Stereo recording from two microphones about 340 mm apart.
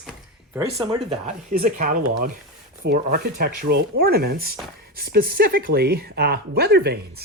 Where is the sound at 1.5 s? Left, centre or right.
Right.